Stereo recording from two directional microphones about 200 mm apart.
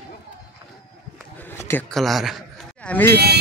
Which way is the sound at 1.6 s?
5° left (ahead or behind).